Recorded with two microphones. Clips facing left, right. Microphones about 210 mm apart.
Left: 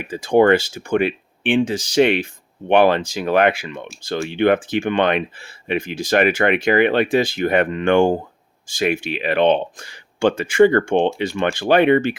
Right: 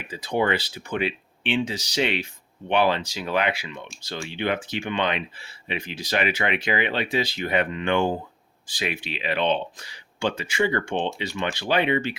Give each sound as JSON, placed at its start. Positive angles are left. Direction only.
{"t": 0.0, "sound": "speech", "side_deg": 50}